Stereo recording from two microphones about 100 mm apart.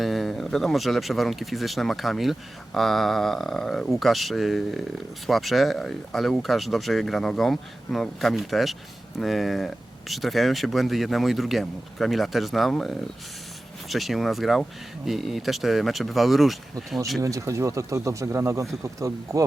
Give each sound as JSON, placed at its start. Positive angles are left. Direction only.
{"t": 0.0, "sound": "speech", "side_deg": 0}
{"t": 17.2, "sound": "speech", "side_deg": -35}